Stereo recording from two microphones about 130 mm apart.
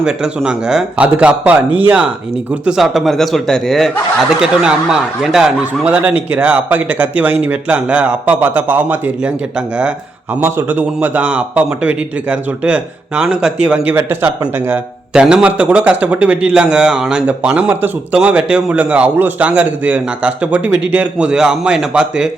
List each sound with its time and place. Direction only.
0.0 s a man's voice: 5° right (ahead or behind)
15.1 s a man's voice: 5° right (ahead or behind)